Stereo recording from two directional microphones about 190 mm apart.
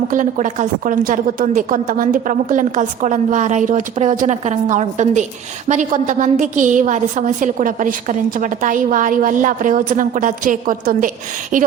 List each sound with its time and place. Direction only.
0.1 s a woman's voice: 40° right (ahead or behind)